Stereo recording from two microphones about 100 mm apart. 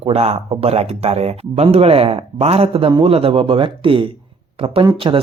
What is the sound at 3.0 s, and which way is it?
Speech, 70° right (ahead or behind).